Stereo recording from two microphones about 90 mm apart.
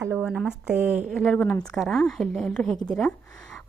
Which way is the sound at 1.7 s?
5° left (ahead or behind).